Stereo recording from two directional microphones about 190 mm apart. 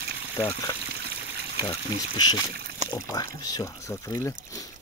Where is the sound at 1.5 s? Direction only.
25° left (ahead or behind).